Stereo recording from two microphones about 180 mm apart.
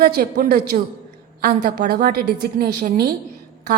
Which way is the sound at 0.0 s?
55° right (ahead or behind).